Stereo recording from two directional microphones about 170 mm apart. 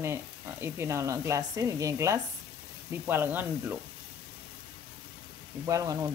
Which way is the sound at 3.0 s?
10° right (ahead or behind).